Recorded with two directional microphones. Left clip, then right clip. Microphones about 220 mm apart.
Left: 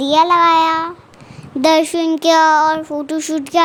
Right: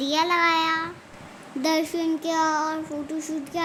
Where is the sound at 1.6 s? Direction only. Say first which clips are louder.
Left 11 dB; 40° left (ahead or behind).